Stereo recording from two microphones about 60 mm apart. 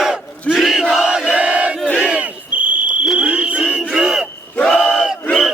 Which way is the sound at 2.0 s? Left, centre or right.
Right.